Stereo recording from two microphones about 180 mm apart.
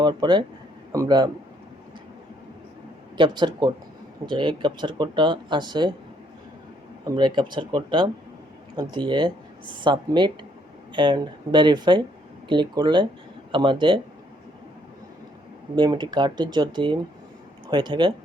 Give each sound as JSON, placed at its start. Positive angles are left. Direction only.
{"t": 0.0, "sound": "a man's voice", "side_deg": -25}
{"t": 3.2, "sound": "speech", "side_deg": -25}
{"t": 7.0, "sound": "speech", "side_deg": -25}
{"t": 15.7, "sound": "speech", "side_deg": -25}